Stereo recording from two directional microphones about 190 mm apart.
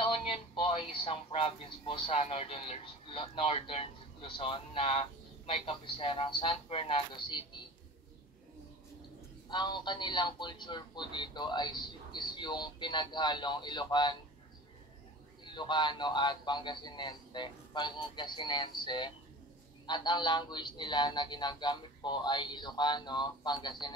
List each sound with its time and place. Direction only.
0.0 s speech: 30° left (ahead or behind)
9.5 s speech: 25° left (ahead or behind)
15.4 s speech: 25° left (ahead or behind)